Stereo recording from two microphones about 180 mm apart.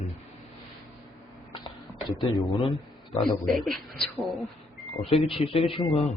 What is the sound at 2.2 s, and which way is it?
Speech, 30° left (ahead or behind).